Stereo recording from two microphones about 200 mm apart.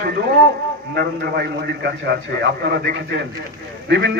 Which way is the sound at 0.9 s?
55° right (ahead or behind).